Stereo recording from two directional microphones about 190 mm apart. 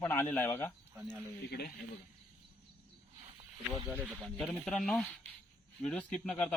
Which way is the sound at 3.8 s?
10° right (ahead or behind).